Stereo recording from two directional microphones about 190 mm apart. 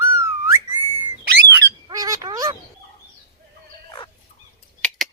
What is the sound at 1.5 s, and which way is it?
Squawk, 20° right (ahead or behind).